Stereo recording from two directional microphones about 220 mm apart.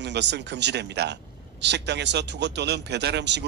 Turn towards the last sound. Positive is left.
turn(degrees=-50)  # may be behind; listen again after turning